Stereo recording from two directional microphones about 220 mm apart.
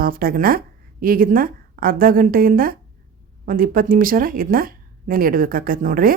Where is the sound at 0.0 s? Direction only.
40° right (ahead or behind).